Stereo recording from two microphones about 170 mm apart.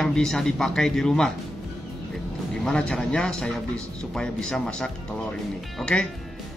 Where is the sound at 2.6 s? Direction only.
5° left (ahead or behind).